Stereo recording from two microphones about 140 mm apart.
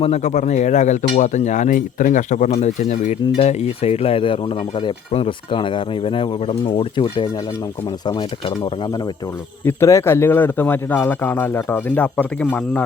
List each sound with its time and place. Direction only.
0.0 s speech: 50° left (ahead or behind); by 9.0 s 30° left (ahead or behind)
9.6 s a man's voice: 20° left (ahead or behind)